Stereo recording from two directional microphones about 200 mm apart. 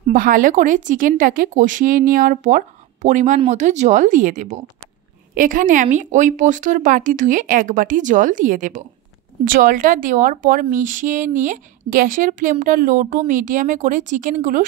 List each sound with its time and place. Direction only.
0.0 s speech: 45° right (ahead or behind)